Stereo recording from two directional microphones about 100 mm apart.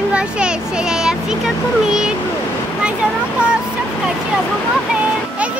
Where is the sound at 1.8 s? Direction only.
5° right (ahead or behind).